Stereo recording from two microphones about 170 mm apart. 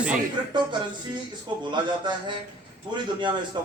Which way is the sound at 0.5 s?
25° right (ahead or behind).